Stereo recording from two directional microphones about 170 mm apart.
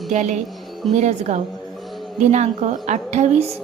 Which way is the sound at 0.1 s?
45° right (ahead or behind).